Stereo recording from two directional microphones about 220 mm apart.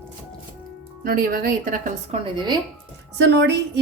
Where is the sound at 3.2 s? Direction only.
50° right (ahead or behind).